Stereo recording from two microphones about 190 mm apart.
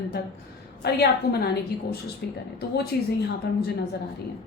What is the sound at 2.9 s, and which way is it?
Speech, 55° left (ahead or behind).